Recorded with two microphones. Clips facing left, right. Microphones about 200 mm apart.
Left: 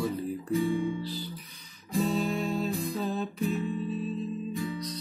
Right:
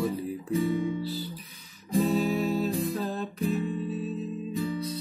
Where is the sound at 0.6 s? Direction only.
40° right (ahead or behind).